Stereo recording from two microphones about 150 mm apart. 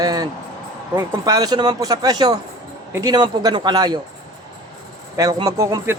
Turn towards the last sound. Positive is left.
turn(degrees=-20)  # may be behind; listen again after turning